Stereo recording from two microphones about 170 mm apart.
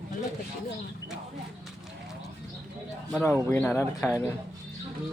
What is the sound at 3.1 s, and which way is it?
Speech, 10° left (ahead or behind).